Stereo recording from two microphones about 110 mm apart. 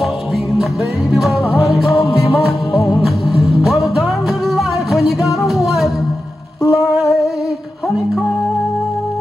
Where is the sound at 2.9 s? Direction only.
Centre (ahead or behind).